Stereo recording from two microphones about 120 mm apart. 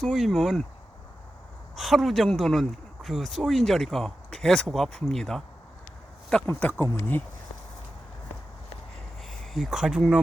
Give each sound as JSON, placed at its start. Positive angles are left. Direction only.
{"t": 0.0, "sound": "speech", "side_deg": 0}
{"t": 1.7, "sound": "speech", "side_deg": 0}
{"t": 6.5, "sound": "speech", "side_deg": 15}
{"t": 9.4, "sound": "speech", "side_deg": 0}